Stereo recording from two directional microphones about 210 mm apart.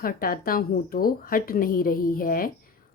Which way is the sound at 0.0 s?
45° left (ahead or behind).